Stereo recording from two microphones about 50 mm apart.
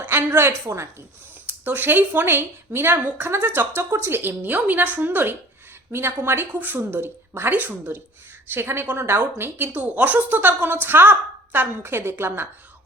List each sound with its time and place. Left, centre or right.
0.0 s a sound: right
0.3 s a woman's voice: right
1.5 s a woman's voice: right
3.8 s speech: right
4.2 s a woman's voice: right
6.5 s a woman's voice: right
6.7 s a woman's voice: right
8.5 s a woman's voice: right
9.2 s a woman's voice: right
9.8 s a woman's voice: right